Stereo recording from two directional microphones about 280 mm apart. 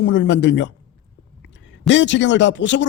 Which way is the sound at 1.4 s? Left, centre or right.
Left.